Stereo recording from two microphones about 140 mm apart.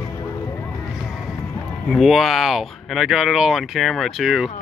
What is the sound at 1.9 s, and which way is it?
Speech, centre (ahead or behind).